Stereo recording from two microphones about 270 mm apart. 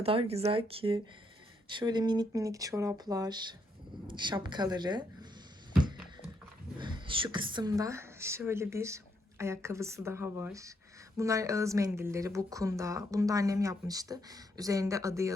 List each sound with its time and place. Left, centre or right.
0.0 s a woman's voice: right
6.7 s speech: centre